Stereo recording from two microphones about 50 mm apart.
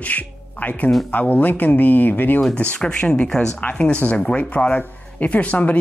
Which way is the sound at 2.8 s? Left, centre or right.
Left.